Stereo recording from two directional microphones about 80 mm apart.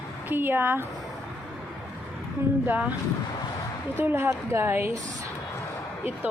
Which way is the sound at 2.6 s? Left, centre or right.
Right.